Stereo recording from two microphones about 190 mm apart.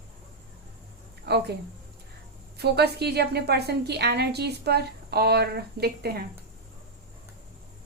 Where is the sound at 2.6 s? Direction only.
60° right (ahead or behind).